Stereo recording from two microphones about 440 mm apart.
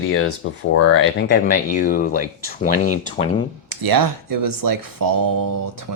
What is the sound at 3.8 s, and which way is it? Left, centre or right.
Speech, right.